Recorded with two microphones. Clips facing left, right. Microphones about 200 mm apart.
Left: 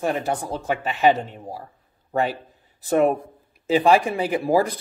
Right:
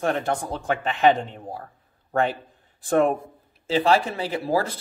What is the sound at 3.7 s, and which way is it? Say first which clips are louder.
Speech: left 3 dB; 15° left (ahead or behind).